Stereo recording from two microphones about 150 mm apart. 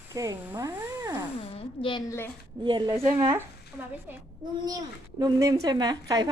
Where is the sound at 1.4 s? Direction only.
35° left (ahead or behind).